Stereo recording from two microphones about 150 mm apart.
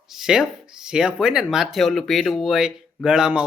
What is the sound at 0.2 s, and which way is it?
Speech, 5° right (ahead or behind).